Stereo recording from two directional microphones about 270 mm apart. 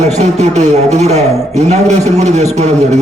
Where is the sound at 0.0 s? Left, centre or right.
Right.